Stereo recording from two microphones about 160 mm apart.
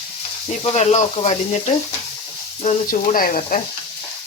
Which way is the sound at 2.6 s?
55° left (ahead or behind).